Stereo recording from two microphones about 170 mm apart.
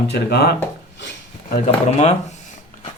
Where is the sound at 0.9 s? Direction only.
75° left (ahead or behind).